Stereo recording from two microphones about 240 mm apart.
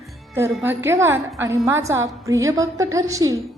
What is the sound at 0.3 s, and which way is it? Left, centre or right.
A woman's voice, centre.